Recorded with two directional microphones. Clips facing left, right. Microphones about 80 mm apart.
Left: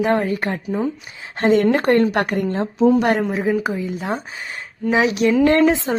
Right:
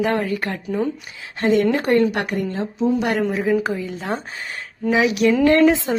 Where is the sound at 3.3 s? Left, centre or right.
Left.